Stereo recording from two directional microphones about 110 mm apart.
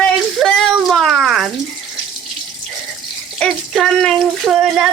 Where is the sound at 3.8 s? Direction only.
5° left (ahead or behind).